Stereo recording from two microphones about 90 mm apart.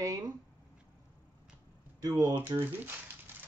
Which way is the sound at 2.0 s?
45° right (ahead or behind).